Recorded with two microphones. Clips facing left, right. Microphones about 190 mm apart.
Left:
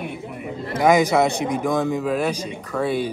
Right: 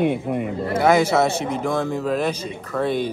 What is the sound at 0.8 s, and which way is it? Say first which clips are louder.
A man's voice: left 1 dB; 15° left (ahead or behind).